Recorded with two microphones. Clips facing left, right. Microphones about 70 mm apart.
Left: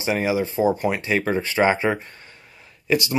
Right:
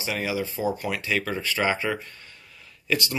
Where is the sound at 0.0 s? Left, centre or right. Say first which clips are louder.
Left 6 dB; left.